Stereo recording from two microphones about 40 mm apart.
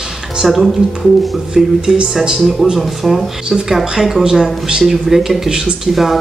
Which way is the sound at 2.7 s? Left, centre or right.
Centre.